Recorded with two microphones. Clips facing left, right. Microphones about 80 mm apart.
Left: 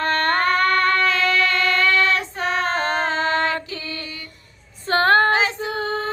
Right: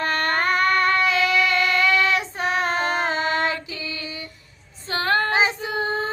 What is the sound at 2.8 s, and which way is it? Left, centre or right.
Music, centre.